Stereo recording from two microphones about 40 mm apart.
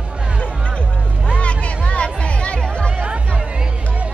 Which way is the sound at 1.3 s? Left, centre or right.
Left.